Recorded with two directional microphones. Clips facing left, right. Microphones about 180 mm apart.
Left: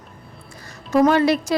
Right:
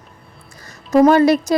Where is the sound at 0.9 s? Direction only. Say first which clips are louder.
Right 4 dB; 40° right (ahead or behind).